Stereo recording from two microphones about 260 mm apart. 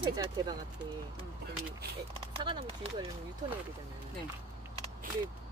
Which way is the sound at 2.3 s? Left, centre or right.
Right.